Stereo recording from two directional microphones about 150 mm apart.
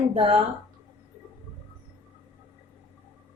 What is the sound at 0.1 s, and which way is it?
Speech, 40° right (ahead or behind).